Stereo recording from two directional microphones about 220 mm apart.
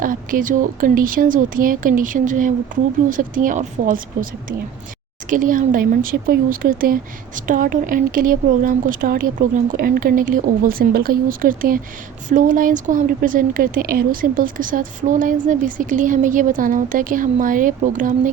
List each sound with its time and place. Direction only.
0.0 s speech: 40° right (ahead or behind)